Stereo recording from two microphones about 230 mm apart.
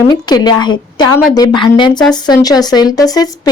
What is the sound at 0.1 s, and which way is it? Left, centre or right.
Speech, centre.